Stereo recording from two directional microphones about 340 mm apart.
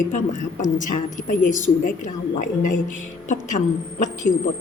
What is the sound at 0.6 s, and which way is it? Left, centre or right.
A woman's voice, left.